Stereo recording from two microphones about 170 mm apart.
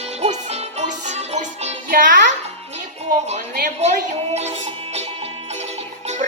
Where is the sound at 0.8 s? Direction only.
40° right (ahead or behind).